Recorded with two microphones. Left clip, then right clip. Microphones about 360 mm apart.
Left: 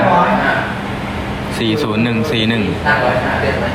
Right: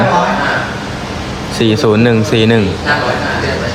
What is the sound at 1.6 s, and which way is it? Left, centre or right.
Speech, right.